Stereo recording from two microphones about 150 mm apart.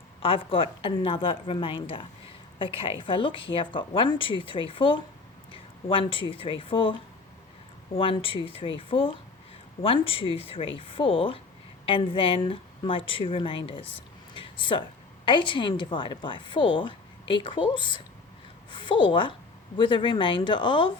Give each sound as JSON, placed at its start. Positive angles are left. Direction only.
{"t": 0.2, "sound": "a woman's voice", "side_deg": 40}
{"t": 7.9, "sound": "a woman's voice", "side_deg": 35}